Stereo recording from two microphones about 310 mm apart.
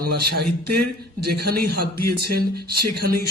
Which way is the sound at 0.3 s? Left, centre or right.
Right.